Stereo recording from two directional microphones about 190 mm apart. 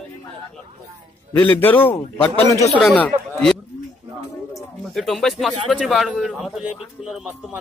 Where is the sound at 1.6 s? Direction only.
10° left (ahead or behind).